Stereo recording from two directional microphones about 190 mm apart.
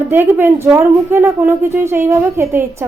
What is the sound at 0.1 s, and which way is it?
Speech, 10° right (ahead or behind).